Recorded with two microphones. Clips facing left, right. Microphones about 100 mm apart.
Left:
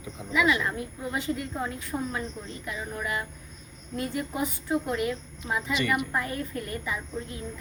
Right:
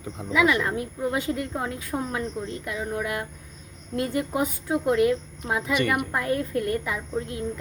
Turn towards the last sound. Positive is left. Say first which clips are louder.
# right 6 dB
turn(degrees=-85)